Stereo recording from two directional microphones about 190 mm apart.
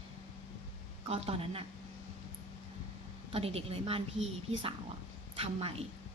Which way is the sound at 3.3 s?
30° right (ahead or behind).